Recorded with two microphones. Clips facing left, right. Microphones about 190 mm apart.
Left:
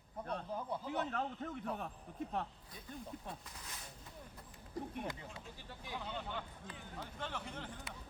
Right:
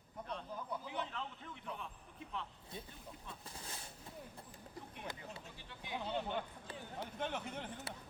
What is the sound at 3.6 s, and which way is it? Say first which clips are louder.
Speech: right 2 dB; 30° right (ahead or behind).